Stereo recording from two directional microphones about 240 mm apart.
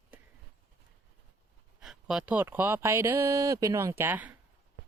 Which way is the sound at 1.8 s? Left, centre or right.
Centre.